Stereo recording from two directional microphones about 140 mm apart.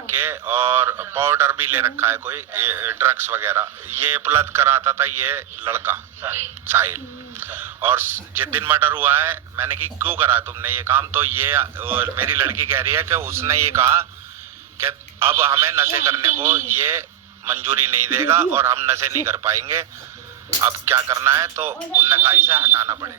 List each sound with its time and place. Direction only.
0.2 s a man's voice: 15° right (ahead or behind)